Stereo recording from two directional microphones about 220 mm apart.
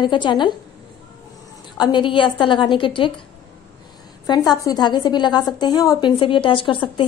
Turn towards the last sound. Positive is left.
turn(degrees=25)  # may be behind; listen again after turning